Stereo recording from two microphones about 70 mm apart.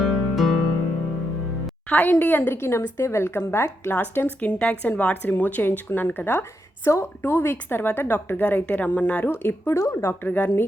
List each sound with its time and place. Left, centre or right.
0.0 s music: centre
1.9 s speech: left
2.6 s a woman's voice: left
9.7 s a woman's voice: left